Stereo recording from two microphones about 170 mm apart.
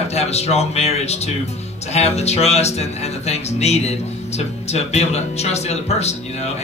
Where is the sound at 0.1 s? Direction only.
40° left (ahead or behind).